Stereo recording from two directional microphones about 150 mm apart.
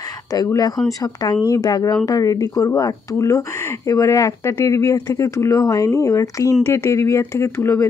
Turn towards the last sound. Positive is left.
turn(degrees=20)  # may be behind; listen again after turning